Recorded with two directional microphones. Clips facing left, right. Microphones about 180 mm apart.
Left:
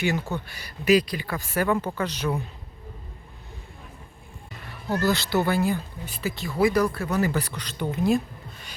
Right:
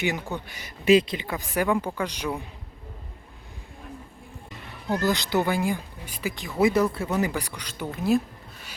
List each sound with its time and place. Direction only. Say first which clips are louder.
0.0 s speech: left 2 dB; 15° right (ahead or behind)
4.9 s speech: left 1 dB; 15° right (ahead or behind)
7.3 s speech: left 3 dB; 10° right (ahead or behind)